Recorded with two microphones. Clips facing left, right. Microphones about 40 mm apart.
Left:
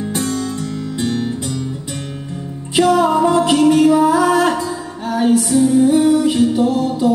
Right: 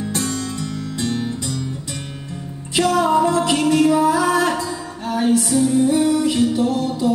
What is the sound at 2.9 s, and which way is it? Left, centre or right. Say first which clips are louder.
Music: left 2 dB; centre.